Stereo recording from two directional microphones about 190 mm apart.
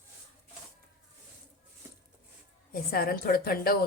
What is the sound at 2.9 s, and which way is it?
Speech, 50° left (ahead or behind).